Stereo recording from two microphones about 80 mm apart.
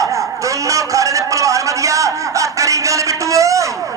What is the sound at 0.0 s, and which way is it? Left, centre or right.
A man's voice, right.